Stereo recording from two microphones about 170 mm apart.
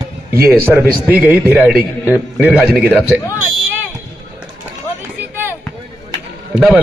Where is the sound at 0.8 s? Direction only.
10° right (ahead or behind).